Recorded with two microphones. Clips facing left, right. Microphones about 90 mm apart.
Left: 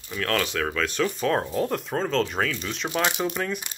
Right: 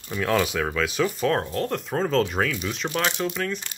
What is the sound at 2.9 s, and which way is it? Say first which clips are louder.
Speech: left 2 dB; 10° left (ahead or behind).